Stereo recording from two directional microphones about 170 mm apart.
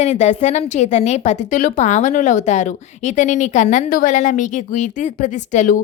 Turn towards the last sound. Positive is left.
turn(degrees=45)  # may be behind; listen again after turning